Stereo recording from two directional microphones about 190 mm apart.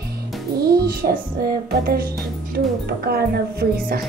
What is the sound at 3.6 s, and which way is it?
Music, 50° right (ahead or behind).